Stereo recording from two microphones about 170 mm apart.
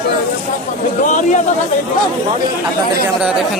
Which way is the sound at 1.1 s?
45° left (ahead or behind).